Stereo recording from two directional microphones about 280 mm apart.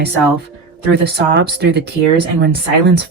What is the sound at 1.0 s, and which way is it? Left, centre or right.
Speech, right.